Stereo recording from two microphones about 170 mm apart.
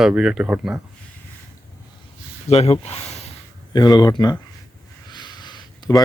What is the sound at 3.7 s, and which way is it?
Speech, 25° left (ahead or behind).